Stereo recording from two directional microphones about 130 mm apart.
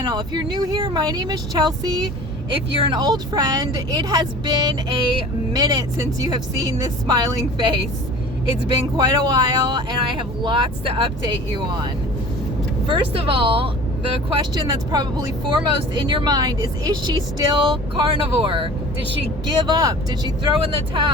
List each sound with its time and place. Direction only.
0.0 s speech: 35° right (ahead or behind)
12.9 s speech: 40° right (ahead or behind)